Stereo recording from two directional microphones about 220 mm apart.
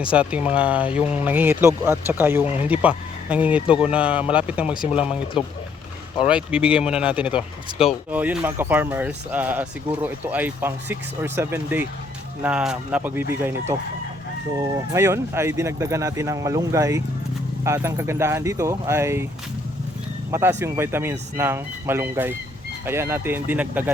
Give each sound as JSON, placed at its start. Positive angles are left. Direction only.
{"t": 0.1, "sound": "speech", "side_deg": -5}
{"t": 14.6, "sound": "speech", "side_deg": -10}
{"t": 20.3, "sound": "speech", "side_deg": -10}